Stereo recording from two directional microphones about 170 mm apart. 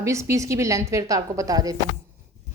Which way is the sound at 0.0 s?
15° right (ahead or behind).